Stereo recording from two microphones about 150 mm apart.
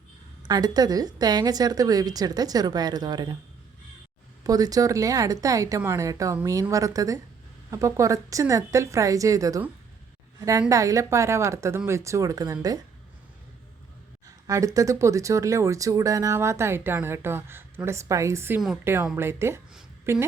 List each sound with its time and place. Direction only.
0.4 s speech: 25° right (ahead or behind)
4.4 s speech: 25° right (ahead or behind)
10.7 s speech: 20° right (ahead or behind)
14.3 s speech: 20° right (ahead or behind)